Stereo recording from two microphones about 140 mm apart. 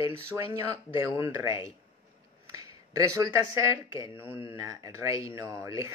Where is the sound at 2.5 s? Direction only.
25° right (ahead or behind).